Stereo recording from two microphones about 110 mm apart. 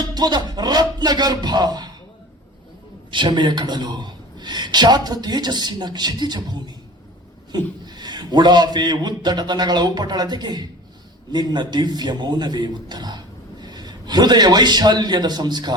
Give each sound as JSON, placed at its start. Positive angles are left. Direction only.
{"t": 0.0, "sound": "a man's voice", "side_deg": -40}
{"t": 3.1, "sound": "a man's voice", "side_deg": -45}